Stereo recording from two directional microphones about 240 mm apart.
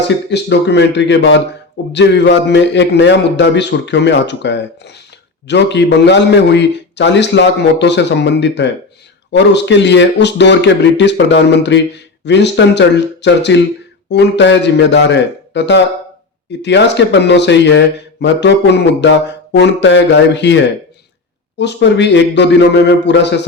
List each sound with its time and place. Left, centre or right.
0.3 s speech: left